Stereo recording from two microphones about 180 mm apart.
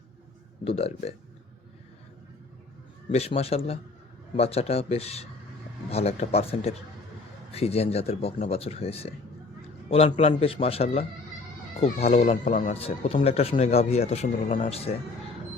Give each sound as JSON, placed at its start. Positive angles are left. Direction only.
{"t": 0.6, "sound": "speech", "side_deg": 35}
{"t": 3.1, "sound": "speech", "side_deg": 35}